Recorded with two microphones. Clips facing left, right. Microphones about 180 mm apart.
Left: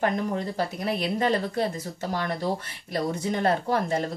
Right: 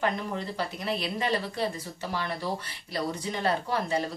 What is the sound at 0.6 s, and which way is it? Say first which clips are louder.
Speech: left 4 dB; 50° left (ahead or behind).